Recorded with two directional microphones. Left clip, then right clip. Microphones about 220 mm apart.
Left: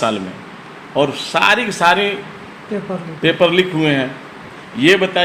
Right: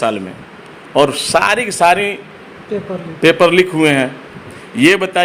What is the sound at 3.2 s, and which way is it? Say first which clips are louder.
A man's voice: right 4 dB; 55° right (ahead or behind).